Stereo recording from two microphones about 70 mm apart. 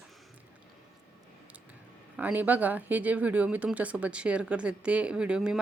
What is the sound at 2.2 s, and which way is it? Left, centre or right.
A woman's voice, right.